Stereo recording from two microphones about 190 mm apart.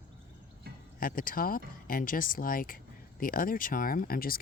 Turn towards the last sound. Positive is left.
turn(degrees=50)  # may be behind; listen again after turning